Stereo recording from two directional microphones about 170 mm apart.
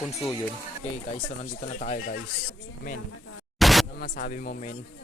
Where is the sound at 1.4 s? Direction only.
45° left (ahead or behind).